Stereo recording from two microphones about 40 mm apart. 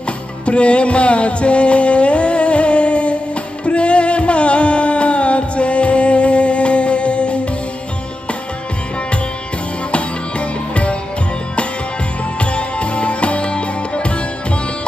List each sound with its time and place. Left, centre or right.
0.5 s music: left
10.7 s music: left
12.4 s music: left